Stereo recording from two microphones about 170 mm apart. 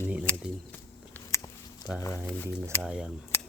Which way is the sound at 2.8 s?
5° right (ahead or behind).